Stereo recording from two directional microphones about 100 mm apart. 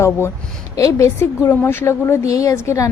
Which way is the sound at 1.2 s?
20° left (ahead or behind).